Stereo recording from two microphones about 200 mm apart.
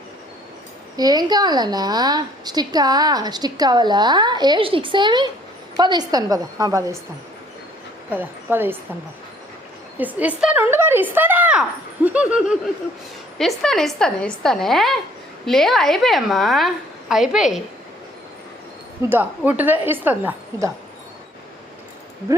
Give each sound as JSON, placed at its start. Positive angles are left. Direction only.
{"t": 0.9, "sound": "a woman's voice", "side_deg": -20}
{"t": 8.1, "sound": "a woman's voice", "side_deg": -10}
{"t": 10.0, "sound": "a woman's voice", "side_deg": -10}
{"t": 19.0, "sound": "a woman's voice", "side_deg": -10}